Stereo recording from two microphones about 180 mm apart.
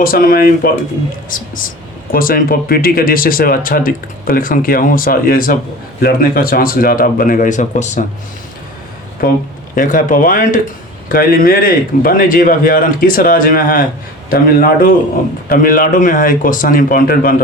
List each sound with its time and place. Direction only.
0.0 s speech: 55° left (ahead or behind)
2.1 s speech: 55° left (ahead or behind)
9.7 s speech: 50° left (ahead or behind)